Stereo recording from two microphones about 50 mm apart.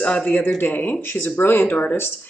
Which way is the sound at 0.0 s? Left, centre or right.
Left.